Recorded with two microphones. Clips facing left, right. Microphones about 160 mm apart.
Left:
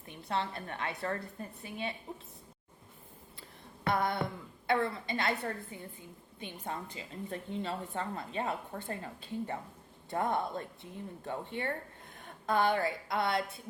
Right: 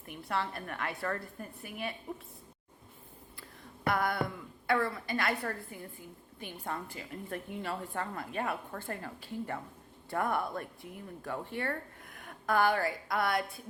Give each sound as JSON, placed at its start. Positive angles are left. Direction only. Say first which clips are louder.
{"t": 0.1, "sound": "speech", "louder": "even", "side_deg": 20}
{"t": 3.8, "sound": "speech", "louder": "even", "side_deg": 25}